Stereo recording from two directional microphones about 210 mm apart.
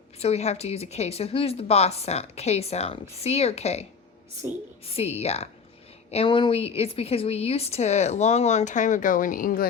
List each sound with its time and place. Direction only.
0.2 s a woman's voice: 30° left (ahead or behind)
4.4 s a woman's voice: 10° right (ahead or behind)
4.9 s a woman's voice: 30° left (ahead or behind)